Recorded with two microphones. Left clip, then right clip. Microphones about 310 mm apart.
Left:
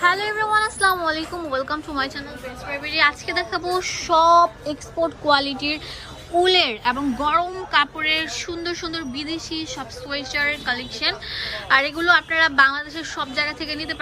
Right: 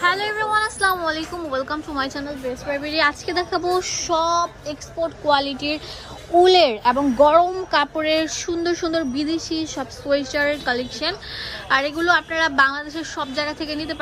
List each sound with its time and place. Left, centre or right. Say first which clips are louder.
0.0 s a woman's voice: left 1 dB; centre